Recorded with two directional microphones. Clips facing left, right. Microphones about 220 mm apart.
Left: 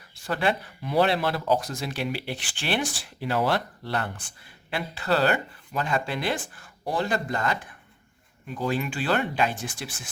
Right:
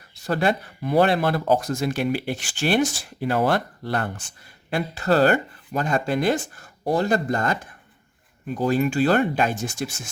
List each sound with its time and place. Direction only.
0.2 s speech: 40° right (ahead or behind)